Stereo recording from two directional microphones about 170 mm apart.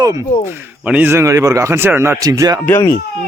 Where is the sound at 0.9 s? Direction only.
10° right (ahead or behind).